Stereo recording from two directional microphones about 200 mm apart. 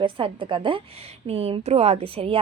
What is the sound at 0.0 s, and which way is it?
Speech, 25° right (ahead or behind).